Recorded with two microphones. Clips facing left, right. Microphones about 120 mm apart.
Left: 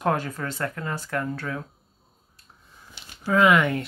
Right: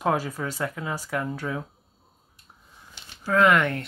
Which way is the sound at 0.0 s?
5° right (ahead or behind).